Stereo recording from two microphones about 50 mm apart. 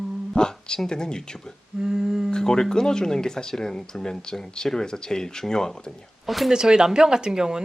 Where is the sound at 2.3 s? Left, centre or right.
Centre.